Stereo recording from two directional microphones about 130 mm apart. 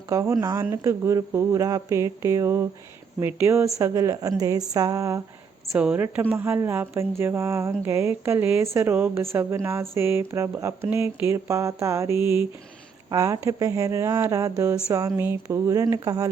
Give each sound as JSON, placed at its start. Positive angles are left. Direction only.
{"t": 0.1, "sound": "speech", "side_deg": -25}
{"t": 5.7, "sound": "speech", "side_deg": -10}